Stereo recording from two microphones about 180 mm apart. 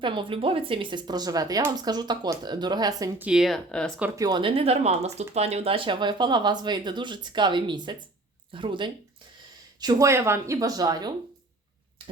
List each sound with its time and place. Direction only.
0.0 s speech: 25° right (ahead or behind)
3.2 s speech: centre (ahead or behind)
4.2 s speech: 25° right (ahead or behind)
9.8 s speech: 15° right (ahead or behind)